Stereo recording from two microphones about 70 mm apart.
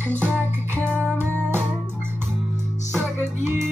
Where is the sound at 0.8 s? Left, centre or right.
Right.